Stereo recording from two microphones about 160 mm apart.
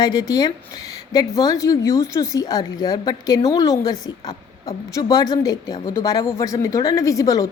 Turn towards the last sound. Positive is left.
turn(degrees=20)  # may be behind; listen again after turning